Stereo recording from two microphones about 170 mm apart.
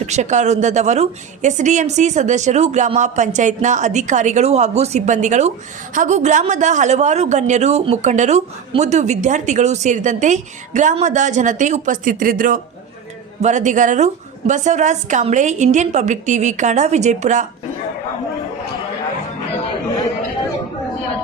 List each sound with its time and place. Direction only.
0.0 s a man's voice: 45° right (ahead or behind)